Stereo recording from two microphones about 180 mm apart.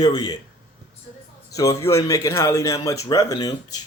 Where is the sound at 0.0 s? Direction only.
20° left (ahead or behind).